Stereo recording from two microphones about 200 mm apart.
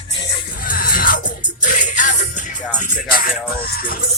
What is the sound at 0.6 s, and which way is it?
Music, 45° left (ahead or behind).